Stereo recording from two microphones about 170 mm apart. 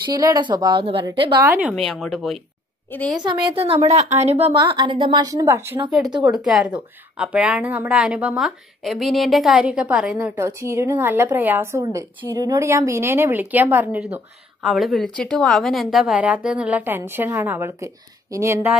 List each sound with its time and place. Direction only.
0.0 s a woman's voice: 20° right (ahead or behind)
1.4 s a woman's voice: 10° right (ahead or behind); by 3.2 s 5° left (ahead or behind)
3.2 s a woman's voice: 30° right (ahead or behind)
4.6 s a woman's voice: 25° right (ahead or behind)
6.3 s a woman's voice: centre (ahead or behind)